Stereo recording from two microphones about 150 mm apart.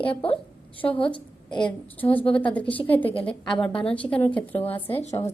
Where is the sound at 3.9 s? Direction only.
10° left (ahead or behind).